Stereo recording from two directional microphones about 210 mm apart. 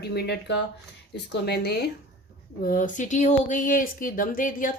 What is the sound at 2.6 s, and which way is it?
Speech, 40° left (ahead or behind).